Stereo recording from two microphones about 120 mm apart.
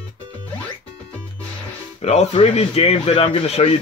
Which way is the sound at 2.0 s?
60° left (ahead or behind).